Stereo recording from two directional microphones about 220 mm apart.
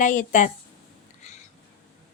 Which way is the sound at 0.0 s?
35° left (ahead or behind).